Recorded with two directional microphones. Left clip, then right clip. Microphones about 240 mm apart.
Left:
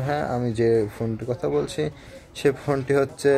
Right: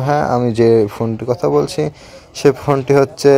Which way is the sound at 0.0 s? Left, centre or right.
Centre.